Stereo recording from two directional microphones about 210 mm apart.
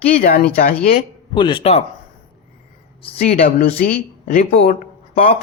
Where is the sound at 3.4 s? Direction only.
45° left (ahead or behind).